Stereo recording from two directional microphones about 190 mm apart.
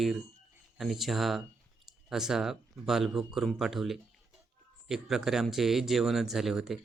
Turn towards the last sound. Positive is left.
turn(degrees=0)  # may be behind; listen again after turning